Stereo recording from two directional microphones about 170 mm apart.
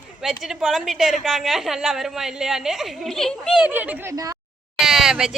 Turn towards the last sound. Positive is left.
turn(degrees=0)  # may be behind; listen again after turning